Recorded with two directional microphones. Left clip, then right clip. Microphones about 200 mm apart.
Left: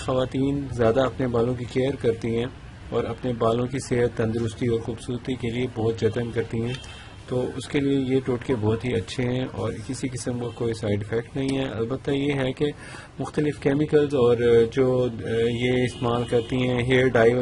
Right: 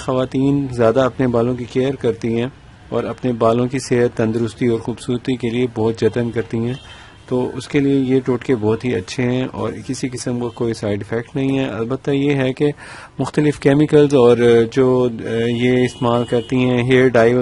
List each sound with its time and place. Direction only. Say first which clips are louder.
0.0 s a man's voice: right 6 dB; 40° right (ahead or behind)
7.5 s a man's voice: right 8 dB; 40° right (ahead or behind)